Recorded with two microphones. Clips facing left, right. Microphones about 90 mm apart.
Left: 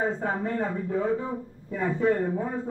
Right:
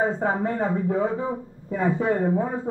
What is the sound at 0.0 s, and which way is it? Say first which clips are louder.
A man's voice: right 4 dB; 15° right (ahead or behind).